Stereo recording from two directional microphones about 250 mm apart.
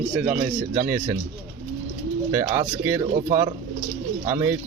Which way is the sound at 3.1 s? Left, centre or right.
Right.